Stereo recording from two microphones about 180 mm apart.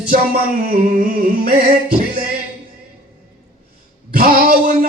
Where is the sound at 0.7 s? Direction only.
55° right (ahead or behind).